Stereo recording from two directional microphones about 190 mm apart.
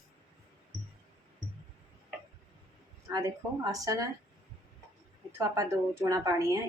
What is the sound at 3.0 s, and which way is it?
A woman's voice, 15° right (ahead or behind).